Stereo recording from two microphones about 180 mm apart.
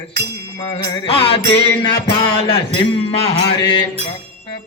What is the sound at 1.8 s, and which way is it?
Speech, 25° left (ahead or behind).